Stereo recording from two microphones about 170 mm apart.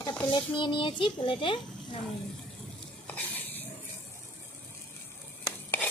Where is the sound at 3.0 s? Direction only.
10° left (ahead or behind).